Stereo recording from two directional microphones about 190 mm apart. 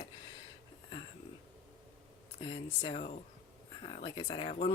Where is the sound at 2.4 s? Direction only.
25° left (ahead or behind).